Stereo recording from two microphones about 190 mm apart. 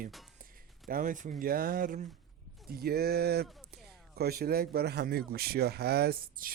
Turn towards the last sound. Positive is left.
turn(degrees=-55)  # may be behind; listen again after turning